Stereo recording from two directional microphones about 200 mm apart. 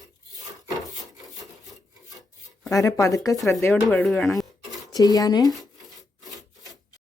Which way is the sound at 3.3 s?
Centre (ahead or behind).